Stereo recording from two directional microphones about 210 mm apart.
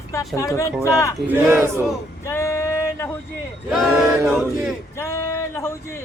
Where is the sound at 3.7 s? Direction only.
Centre (ahead or behind).